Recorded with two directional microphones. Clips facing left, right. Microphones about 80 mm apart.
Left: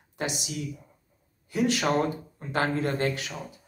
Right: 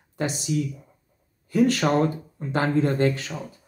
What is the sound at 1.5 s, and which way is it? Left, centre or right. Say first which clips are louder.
Speech: right 5 dB; right.